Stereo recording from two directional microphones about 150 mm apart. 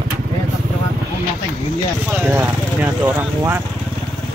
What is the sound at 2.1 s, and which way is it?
Speech, 10° right (ahead or behind).